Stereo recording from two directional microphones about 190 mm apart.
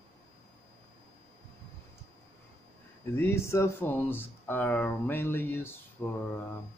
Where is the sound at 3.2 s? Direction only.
15° left (ahead or behind).